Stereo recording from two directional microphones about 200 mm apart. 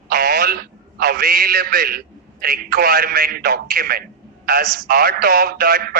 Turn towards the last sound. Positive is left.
turn(degrees=-50)  # may be behind; listen again after turning